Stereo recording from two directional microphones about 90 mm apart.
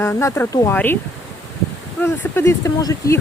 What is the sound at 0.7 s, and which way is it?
Speech, 20° left (ahead or behind).